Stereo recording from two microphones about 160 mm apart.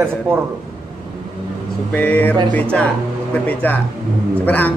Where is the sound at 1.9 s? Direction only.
10° left (ahead or behind).